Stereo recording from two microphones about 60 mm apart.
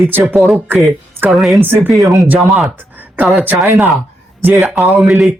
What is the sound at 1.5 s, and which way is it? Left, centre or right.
Speech, right.